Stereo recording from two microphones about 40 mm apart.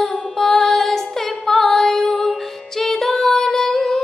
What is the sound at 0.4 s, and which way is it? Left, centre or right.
Music, centre.